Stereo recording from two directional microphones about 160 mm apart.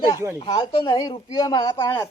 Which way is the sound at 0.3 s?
35° left (ahead or behind).